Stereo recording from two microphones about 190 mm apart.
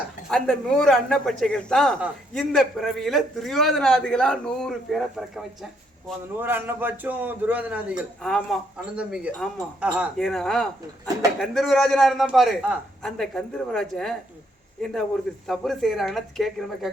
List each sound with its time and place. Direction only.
0.3 s speech: 5° left (ahead or behind)
6.3 s a man's voice: 10° right (ahead or behind)
15.4 s speech: centre (ahead or behind)